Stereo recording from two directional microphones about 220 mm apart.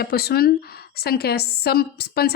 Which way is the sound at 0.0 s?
45° left (ahead or behind).